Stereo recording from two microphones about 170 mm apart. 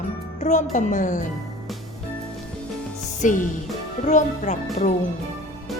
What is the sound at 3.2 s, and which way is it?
A woman's voice, 50° left (ahead or behind).